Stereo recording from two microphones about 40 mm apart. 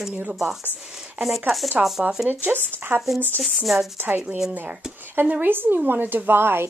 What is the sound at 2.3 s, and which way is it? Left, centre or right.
Speech, right.